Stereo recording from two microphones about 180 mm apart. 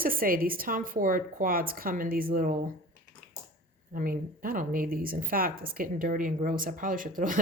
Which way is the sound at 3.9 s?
50° right (ahead or behind).